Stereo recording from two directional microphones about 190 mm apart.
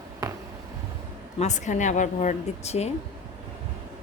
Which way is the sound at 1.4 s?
40° left (ahead or behind).